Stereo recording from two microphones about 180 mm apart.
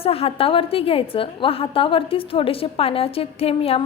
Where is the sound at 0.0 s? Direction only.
30° left (ahead or behind).